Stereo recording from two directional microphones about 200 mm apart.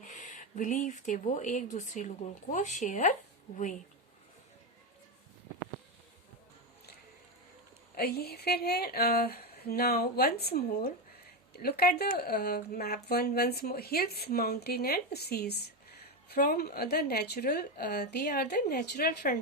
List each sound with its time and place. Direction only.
0.1 s speech: 40° left (ahead or behind)
7.9 s speech: 50° left (ahead or behind)